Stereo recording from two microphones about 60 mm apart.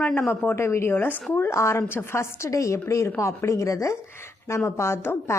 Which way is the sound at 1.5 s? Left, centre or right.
Left.